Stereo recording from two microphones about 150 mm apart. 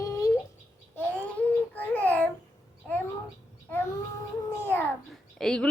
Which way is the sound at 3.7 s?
15° left (ahead or behind).